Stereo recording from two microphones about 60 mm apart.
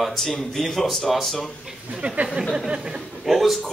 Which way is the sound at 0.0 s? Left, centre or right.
Centre.